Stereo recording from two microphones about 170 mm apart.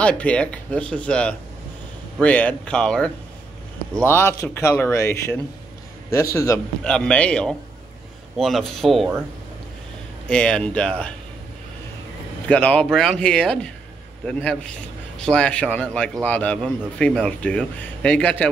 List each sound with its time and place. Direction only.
0.0 s a man's voice: 5° left (ahead or behind)
6.8 s speech: 5° left (ahead or behind)
10.2 s speech: 5° left (ahead or behind)
12.4 s a man's voice: 5° left (ahead or behind)